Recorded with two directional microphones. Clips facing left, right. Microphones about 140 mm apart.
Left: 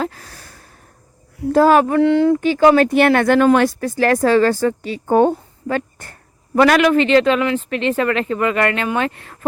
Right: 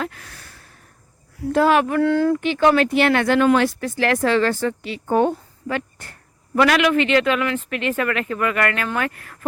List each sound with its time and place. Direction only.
0.0 s a sound: 35° left (ahead or behind)
1.5 s speech: 40° left (ahead or behind)
2.0 s speech: 20° left (ahead or behind)
2.4 s speech: 35° left (ahead or behind)
5.3 s a sound: 40° left (ahead or behind)
6.6 s speech: 40° left (ahead or behind)